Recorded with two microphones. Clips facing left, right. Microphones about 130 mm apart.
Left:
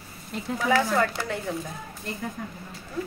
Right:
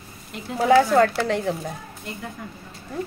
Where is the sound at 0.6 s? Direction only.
80° right.